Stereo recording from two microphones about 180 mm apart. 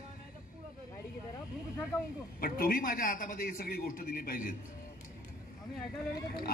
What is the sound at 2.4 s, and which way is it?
A man's voice, 55° left (ahead or behind).